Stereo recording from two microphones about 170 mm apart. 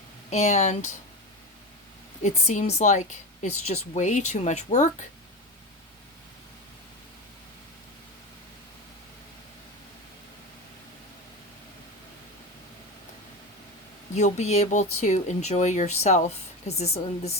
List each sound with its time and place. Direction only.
0.3 s speech: 45° left (ahead or behind)
2.2 s speech: 45° left (ahead or behind)
14.2 s speech: 40° left (ahead or behind)